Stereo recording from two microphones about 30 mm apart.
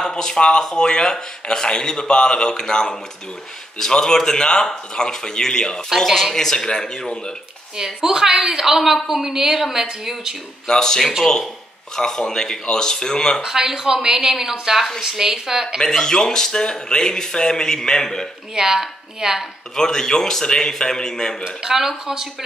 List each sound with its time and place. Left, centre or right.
0.1 s speech: left
4.0 s speech: centre
7.7 s a woman's voice: centre
10.7 s speech: centre
13.5 s a woman's voice: centre
15.8 s speech: left
18.5 s a woman's voice: centre
19.7 s speech: centre
21.5 s a woman's voice: centre